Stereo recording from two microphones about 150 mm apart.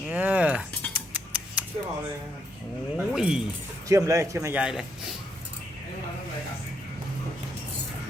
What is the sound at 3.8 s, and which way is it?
Speech, 20° right (ahead or behind).